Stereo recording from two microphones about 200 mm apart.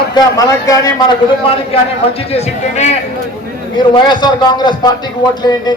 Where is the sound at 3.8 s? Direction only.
25° left (ahead or behind).